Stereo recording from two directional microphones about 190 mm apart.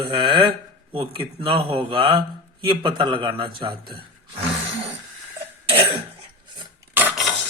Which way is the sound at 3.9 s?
30° right (ahead or behind).